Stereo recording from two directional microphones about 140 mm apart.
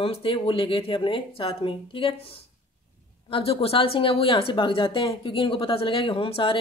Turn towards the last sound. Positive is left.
turn(degrees=40)  # may be behind; listen again after turning